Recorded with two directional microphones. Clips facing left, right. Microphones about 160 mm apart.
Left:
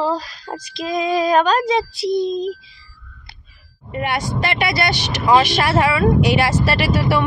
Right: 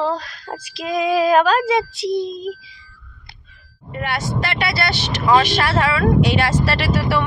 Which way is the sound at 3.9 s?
15° left (ahead or behind).